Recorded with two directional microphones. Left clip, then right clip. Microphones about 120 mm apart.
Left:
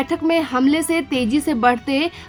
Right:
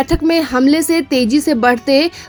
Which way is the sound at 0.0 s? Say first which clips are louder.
Right 4 dB; 35° right (ahead or behind).